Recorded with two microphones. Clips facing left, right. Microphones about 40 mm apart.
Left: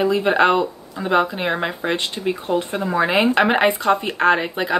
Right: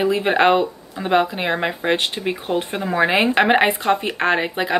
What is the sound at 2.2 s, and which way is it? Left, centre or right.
Speech, right.